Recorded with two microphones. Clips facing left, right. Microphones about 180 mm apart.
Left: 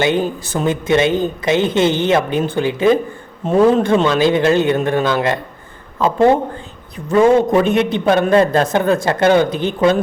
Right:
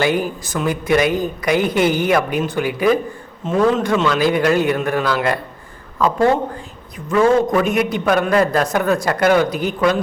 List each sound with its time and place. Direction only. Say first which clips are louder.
0.0 s a man's voice: left 2 dB; 25° left (ahead or behind)